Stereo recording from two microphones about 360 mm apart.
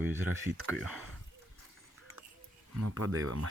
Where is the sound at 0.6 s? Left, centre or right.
Centre.